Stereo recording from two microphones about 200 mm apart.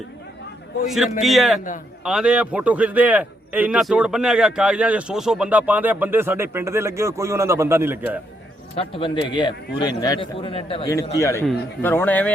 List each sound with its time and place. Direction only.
0.9 s a man's voice: centre (ahead or behind)
8.7 s a man's voice: 25° left (ahead or behind)
11.0 s speech: 15° left (ahead or behind)